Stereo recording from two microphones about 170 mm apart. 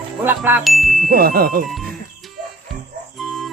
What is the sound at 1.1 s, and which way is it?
Music, 60° right (ahead or behind).